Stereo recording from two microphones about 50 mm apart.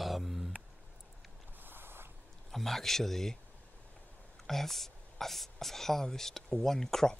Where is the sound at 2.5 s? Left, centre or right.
Centre.